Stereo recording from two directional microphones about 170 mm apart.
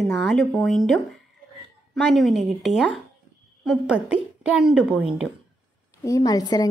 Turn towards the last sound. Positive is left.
turn(degrees=20)  # may be behind; listen again after turning